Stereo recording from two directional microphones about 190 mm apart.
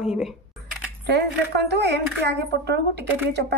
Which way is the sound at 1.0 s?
60° right (ahead or behind).